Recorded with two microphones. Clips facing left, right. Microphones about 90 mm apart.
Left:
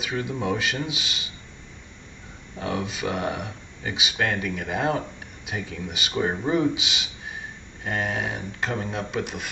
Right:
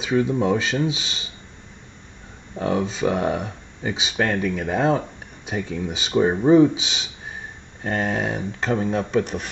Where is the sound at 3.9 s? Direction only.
30° right (ahead or behind).